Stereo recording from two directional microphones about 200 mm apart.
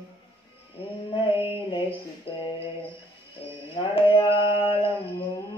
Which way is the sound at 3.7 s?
25° left (ahead or behind).